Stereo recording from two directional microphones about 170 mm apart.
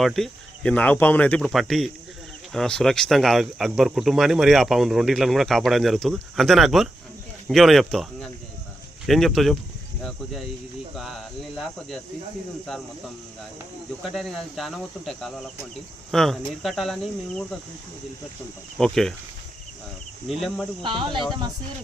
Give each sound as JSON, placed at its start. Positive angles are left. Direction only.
{"t": 0.0, "sound": "speech", "side_deg": 0}
{"t": 11.0, "sound": "speech", "side_deg": 0}
{"t": 14.1, "sound": "speech", "side_deg": 0}
{"t": 18.8, "sound": "speech", "side_deg": 5}
{"t": 20.2, "sound": "speech", "side_deg": 0}
{"t": 20.8, "sound": "speech", "side_deg": -30}